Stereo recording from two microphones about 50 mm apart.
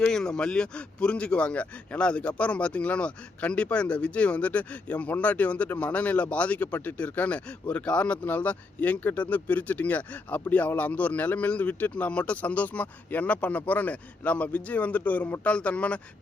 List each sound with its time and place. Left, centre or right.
0.0 s a man's voice: centre; by 15.4 s left
15.4 s a man's voice: left